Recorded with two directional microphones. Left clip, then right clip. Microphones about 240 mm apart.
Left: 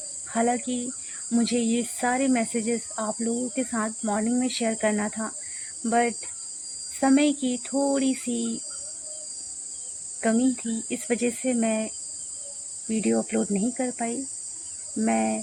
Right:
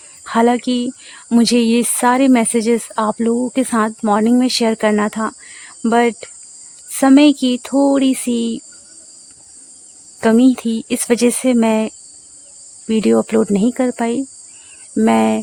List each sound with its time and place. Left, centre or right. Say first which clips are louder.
0.3 s speech: right 11 dB; right
10.2 s speech: right 12 dB; right